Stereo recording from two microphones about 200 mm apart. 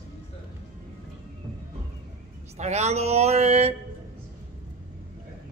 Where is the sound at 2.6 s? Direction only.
35° right (ahead or behind).